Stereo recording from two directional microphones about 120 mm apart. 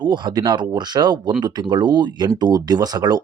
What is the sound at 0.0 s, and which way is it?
Speech, 40° right (ahead or behind).